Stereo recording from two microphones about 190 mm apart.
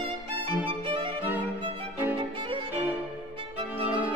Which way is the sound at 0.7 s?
25° right (ahead or behind).